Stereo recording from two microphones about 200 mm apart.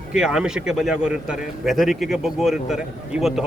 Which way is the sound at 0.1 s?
5° right (ahead or behind).